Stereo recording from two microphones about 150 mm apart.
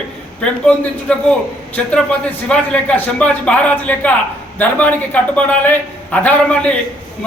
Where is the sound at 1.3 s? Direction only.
10° left (ahead or behind).